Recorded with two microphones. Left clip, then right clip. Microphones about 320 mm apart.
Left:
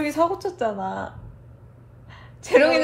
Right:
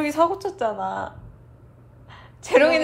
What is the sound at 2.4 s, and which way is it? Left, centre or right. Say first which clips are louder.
Speech: even; right.